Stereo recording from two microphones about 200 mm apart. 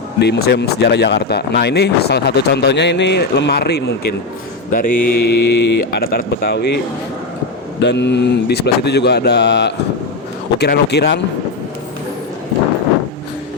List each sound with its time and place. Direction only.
0.2 s speech: 55° left (ahead or behind)
4.7 s speech: 45° left (ahead or behind)